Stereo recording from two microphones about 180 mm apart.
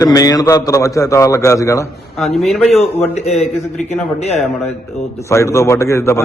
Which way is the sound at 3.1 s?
40° left (ahead or behind).